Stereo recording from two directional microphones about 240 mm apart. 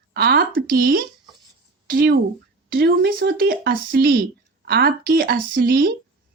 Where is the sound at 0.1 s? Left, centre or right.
Right.